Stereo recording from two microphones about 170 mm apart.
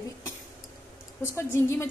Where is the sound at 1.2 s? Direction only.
15° left (ahead or behind).